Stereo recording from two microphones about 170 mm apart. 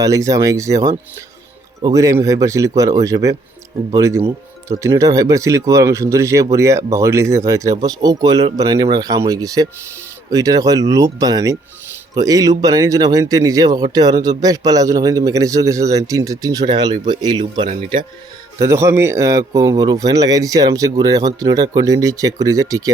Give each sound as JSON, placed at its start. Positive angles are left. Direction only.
{"t": 0.0, "sound": "speech", "side_deg": -20}
{"t": 18.6, "sound": "speech", "side_deg": -15}